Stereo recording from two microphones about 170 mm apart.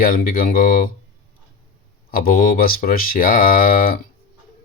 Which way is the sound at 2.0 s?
60° left (ahead or behind).